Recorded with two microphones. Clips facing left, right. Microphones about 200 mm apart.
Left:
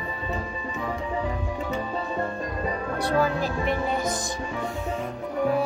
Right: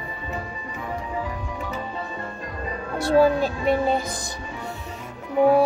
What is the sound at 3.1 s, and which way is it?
Speech, 30° right (ahead or behind).